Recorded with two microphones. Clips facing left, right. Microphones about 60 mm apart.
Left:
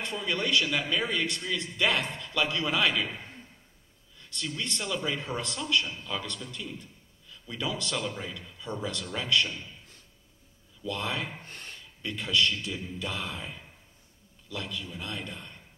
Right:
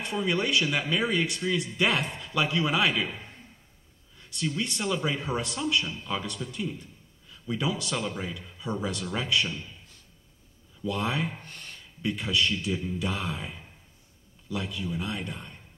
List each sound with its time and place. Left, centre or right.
0.0 s a man's voice: centre
4.6 s a man's voice: centre
10.8 s a man's voice: centre
11.4 s a sound: left
12.0 s a man's voice: centre
14.5 s a man's voice: centre